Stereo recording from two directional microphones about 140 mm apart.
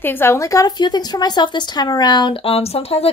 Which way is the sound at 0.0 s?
15° left (ahead or behind).